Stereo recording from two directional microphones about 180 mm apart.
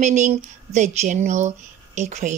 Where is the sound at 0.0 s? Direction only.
40° right (ahead or behind).